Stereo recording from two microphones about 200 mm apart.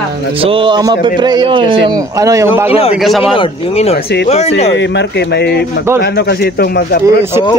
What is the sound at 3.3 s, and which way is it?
Speech, 30° left (ahead or behind).